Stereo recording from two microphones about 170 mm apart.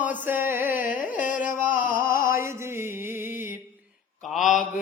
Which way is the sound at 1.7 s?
55° left (ahead or behind).